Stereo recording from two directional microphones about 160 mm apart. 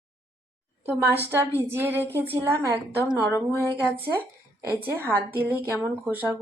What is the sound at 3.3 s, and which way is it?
Speech, 15° left (ahead or behind).